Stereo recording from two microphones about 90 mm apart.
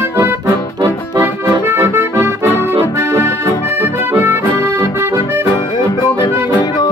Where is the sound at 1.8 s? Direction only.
25° right (ahead or behind).